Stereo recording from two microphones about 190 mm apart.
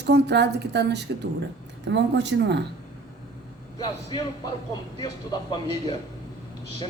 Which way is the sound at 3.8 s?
20° left (ahead or behind).